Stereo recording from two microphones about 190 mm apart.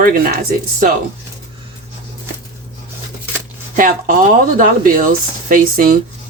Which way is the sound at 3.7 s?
45° right (ahead or behind).